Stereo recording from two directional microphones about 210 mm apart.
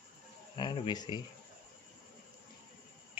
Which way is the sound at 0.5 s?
20° left (ahead or behind).